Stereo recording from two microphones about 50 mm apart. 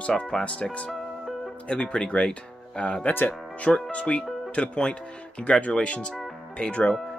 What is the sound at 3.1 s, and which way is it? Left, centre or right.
Speech, left.